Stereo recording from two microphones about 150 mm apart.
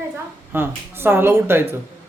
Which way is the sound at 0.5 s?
15° right (ahead or behind).